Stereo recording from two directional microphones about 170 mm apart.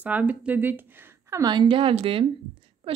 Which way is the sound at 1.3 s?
20° right (ahead or behind).